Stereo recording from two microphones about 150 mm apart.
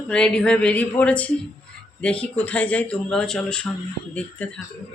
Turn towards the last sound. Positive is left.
turn(degrees=10)  # may be behind; listen again after turning